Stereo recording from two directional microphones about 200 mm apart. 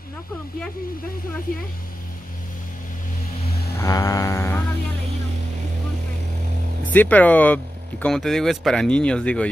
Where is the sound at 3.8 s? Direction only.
15° left (ahead or behind).